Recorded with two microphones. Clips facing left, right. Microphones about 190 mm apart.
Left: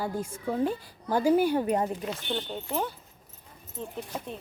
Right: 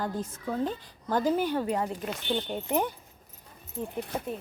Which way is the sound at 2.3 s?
15° right (ahead or behind).